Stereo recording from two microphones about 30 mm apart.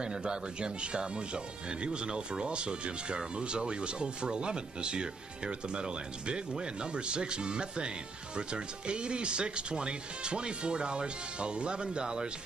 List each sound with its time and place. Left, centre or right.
0.0 s speech: right